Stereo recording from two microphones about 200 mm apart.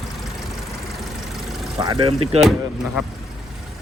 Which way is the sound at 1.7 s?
20° right (ahead or behind).